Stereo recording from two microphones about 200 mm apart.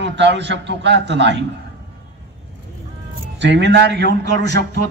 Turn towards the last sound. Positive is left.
turn(degrees=-60)  # may be behind; listen again after turning